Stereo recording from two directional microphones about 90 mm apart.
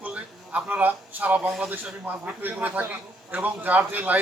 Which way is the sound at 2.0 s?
20° right (ahead or behind).